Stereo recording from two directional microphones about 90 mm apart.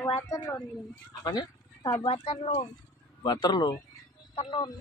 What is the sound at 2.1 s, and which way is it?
Speech, 90° left.